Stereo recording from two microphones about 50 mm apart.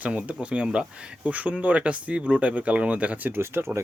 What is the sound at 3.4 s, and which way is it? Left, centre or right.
Speech, right.